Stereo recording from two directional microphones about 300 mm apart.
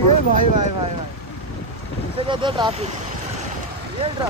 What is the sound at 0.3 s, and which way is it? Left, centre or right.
Speech, right.